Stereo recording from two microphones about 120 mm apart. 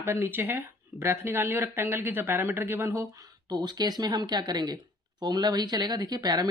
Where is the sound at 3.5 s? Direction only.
35° right (ahead or behind).